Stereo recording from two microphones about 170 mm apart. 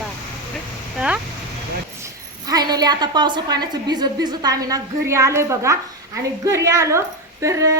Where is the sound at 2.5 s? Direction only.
25° right (ahead or behind).